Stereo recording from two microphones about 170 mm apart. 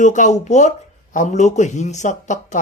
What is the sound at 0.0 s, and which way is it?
Speech, 45° left (ahead or behind).